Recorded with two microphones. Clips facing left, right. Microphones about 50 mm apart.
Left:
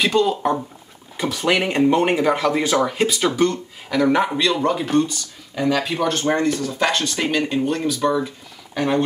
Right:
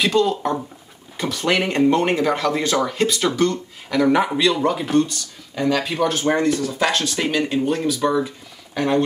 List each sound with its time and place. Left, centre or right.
0.0 s speech: centre